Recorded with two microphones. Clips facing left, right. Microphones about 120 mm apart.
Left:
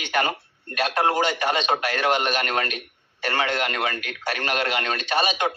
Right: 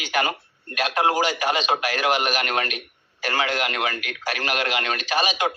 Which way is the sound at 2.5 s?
35° left (ahead or behind).